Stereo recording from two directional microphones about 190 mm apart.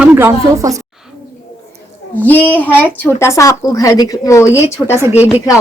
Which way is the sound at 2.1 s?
10° left (ahead or behind).